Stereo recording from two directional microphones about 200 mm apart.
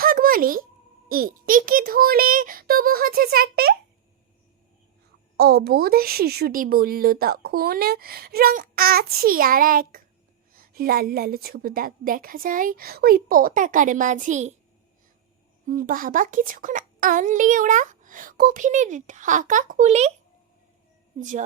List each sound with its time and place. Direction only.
0.0 s a sound: 45° right (ahead or behind)
1.0 s a woman's voice: 45° right (ahead or behind)
5.4 s a woman's voice: 55° right (ahead or behind); by 14.5 s 35° right (ahead or behind)
15.6 s a child's voice: 40° right (ahead or behind)
21.2 s a child's voice: 40° right (ahead or behind)